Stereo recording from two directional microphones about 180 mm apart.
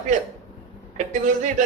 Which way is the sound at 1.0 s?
40° right (ahead or behind).